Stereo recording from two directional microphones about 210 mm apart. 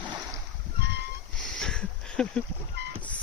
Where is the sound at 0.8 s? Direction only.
55° right (ahead or behind).